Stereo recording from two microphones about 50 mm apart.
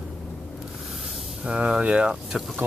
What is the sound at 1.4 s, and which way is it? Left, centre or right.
Speech, right.